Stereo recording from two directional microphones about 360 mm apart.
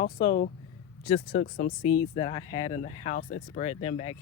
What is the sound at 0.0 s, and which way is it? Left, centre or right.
Speech, left.